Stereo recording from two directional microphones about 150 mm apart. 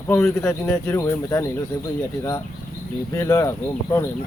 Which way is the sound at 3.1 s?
20° left (ahead or behind).